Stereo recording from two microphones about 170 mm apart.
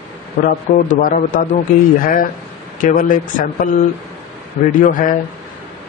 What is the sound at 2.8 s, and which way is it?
Speech, 50° left (ahead or behind).